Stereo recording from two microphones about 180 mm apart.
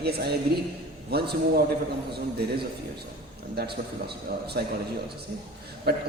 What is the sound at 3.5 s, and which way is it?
A man's voice, 65° right (ahead or behind).